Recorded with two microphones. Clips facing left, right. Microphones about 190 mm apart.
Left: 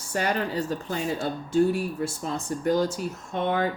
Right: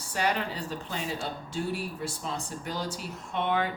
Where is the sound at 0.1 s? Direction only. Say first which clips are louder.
Left 3 dB; 45° left (ahead or behind).